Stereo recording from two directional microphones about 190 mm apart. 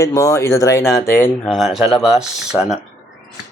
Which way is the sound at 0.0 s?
15° left (ahead or behind).